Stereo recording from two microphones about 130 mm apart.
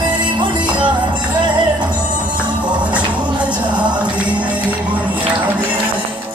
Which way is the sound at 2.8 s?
10° right (ahead or behind).